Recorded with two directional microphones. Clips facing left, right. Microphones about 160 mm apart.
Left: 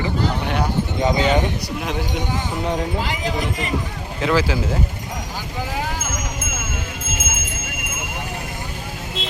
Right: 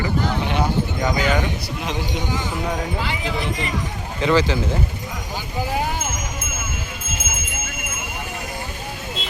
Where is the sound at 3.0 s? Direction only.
40° left (ahead or behind).